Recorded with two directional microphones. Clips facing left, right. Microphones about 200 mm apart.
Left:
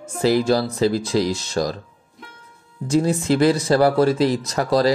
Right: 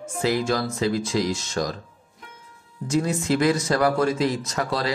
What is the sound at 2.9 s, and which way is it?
Speech, 30° left (ahead or behind).